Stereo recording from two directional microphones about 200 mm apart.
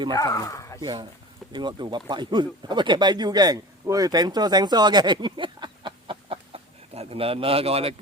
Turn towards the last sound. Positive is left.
turn(degrees=-30)  # may be behind; listen again after turning